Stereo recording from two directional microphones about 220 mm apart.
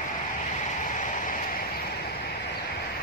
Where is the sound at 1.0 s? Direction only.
35° left (ahead or behind).